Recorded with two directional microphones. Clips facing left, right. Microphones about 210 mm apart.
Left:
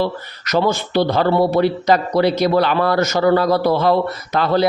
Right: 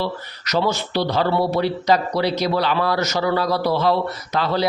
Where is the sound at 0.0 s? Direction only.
50° left (ahead or behind).